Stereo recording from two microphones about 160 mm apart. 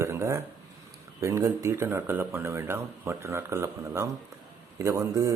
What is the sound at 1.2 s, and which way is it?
Speech, 20° right (ahead or behind).